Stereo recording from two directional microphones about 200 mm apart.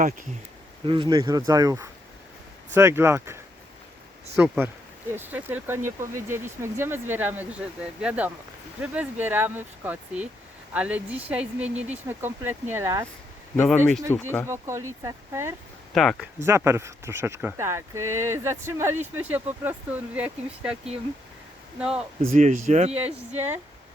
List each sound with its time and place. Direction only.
0.9 s speech: 25° right (ahead or behind)
13.7 s speech: centre (ahead or behind)
14.4 s speech: 15° right (ahead or behind)
16.0 s speech: centre (ahead or behind)
16.4 s speech: 15° right (ahead or behind)
21.8 s speech: 5° right (ahead or behind)
22.2 s speech: 35° right (ahead or behind)